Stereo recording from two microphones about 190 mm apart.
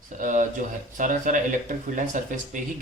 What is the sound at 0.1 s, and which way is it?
Speech, 40° right (ahead or behind).